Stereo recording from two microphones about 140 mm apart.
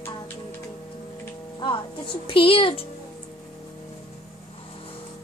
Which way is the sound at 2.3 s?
40° left (ahead or behind).